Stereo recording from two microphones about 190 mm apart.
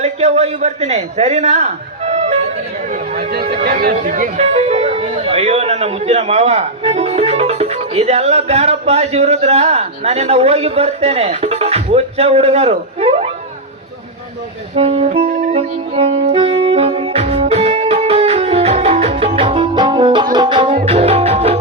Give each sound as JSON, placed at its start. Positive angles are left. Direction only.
{"t": 0.0, "sound": "a man's voice", "side_deg": -35}
{"t": 2.9, "sound": "speech", "side_deg": -50}
{"t": 14.8, "sound": "speech", "side_deg": -30}
{"t": 15.3, "sound": "saxophone", "side_deg": -35}